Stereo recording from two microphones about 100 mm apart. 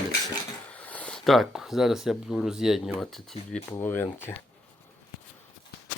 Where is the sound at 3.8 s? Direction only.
20° left (ahead or behind).